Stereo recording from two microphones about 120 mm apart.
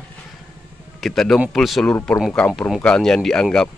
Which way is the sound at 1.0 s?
5° left (ahead or behind).